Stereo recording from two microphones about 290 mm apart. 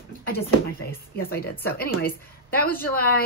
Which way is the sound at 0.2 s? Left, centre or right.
Left.